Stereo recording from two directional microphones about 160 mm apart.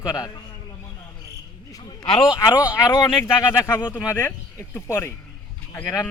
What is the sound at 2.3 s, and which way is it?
Speech, 20° left (ahead or behind).